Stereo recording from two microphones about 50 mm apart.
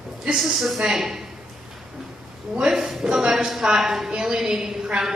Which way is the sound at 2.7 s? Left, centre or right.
Centre.